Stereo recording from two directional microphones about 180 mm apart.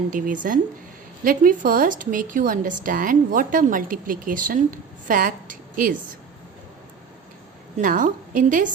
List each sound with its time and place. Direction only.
0.1 s a woman's voice: 45° right (ahead or behind)
7.8 s a woman's voice: 45° right (ahead or behind)